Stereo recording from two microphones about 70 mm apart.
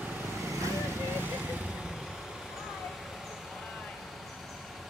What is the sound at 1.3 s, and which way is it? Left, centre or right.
Vehicle, centre.